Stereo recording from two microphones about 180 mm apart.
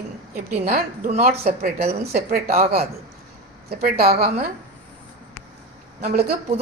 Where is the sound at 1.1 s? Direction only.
35° right (ahead or behind).